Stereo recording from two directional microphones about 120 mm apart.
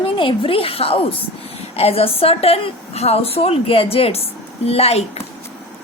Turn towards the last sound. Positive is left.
turn(degrees=60)  # may be behind; listen again after turning